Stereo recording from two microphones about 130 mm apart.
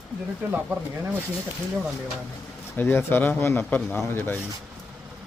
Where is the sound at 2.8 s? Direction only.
15° left (ahead or behind).